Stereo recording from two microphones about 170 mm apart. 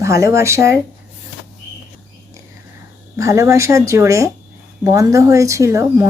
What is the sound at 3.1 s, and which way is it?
Speech, 20° right (ahead or behind).